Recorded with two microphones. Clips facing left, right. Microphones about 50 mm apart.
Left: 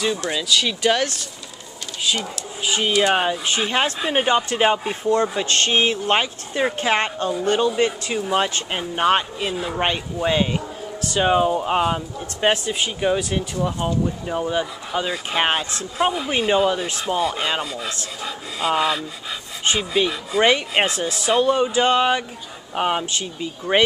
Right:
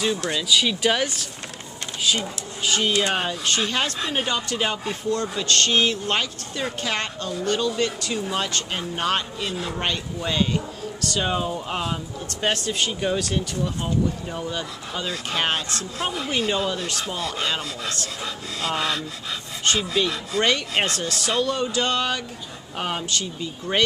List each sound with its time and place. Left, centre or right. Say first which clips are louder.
0.5 s speech: left 1 dB; centre
2.6 s speech: left 3 dB; centre
9.5 s speech: left 3 dB; centre
9.8 s speech: left 5 dB; left